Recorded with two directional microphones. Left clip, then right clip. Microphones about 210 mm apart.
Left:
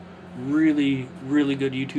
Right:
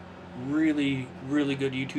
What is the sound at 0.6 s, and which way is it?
Speech, 20° left (ahead or behind).